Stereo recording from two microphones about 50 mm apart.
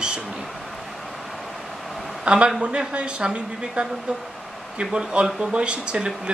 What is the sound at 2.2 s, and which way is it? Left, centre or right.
Speech, right.